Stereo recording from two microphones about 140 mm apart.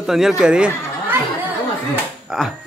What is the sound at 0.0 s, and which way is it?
Speech, 5° right (ahead or behind).